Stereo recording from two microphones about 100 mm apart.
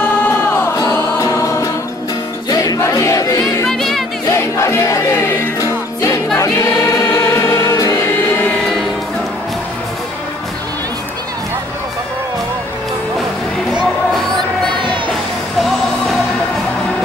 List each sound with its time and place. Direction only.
0.7 s choir: 35° left (ahead or behind)
2.5 s music: 40° left (ahead or behind)
3.6 s music: centre (ahead or behind)
4.3 s music: 25° left (ahead or behind)
6.3 s choir: 30° left (ahead or behind)
14.7 s music: 55° right (ahead or behind)